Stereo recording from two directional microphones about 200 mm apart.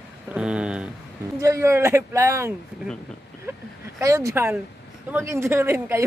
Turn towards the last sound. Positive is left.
turn(degrees=-15)  # may be behind; listen again after turning